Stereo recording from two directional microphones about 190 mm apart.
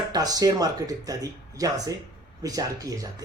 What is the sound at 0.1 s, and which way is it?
A man's voice, 20° right (ahead or behind).